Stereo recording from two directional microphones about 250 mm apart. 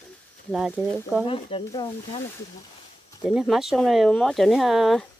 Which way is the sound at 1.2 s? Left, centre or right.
Left.